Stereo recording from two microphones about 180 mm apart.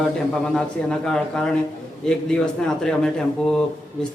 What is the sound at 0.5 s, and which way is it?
A man's voice, 5° left (ahead or behind).